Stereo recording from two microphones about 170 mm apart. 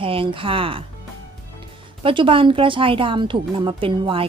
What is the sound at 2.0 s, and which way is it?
Speech, 30° right (ahead or behind).